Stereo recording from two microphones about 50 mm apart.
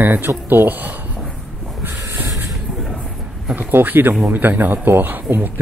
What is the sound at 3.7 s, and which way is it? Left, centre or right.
Speech, right.